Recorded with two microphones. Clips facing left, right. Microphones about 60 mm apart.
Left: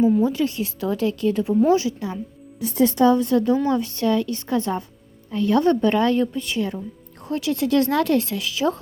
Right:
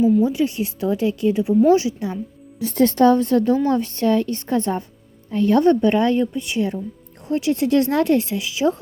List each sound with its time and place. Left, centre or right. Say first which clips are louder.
0.3 s a woman's voice: right 2 dB; right
1.6 s a woman's voice: right 3 dB; right
2.6 s a woman's voice: right 2 dB; right; by 8.7 s centre